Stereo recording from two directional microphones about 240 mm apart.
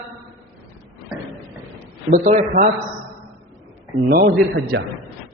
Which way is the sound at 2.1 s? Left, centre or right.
Right.